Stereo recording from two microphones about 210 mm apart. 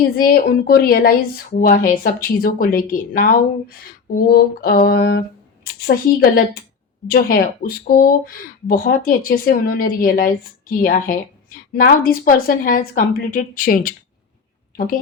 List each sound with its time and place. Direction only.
0.0 s a woman's voice: 45° left (ahead or behind)